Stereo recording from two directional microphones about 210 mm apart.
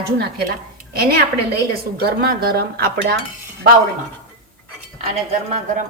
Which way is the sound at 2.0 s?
45° right (ahead or behind).